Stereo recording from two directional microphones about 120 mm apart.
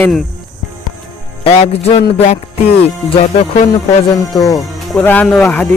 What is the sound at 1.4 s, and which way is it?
Music, 60° left (ahead or behind).